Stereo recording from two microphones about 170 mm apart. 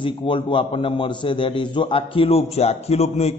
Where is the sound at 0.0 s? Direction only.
30° left (ahead or behind).